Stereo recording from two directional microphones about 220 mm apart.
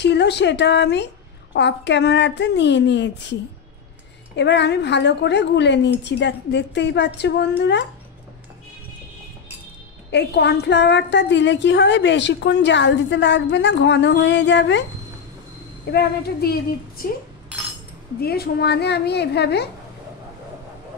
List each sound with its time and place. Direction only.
0.0 s a woman's voice: 50° left (ahead or behind)
4.4 s a woman's voice: 50° left (ahead or behind)
10.1 s a woman's voice: 50° left (ahead or behind)
15.9 s a woman's voice: 45° left (ahead or behind)
18.2 s a woman's voice: 45° left (ahead or behind)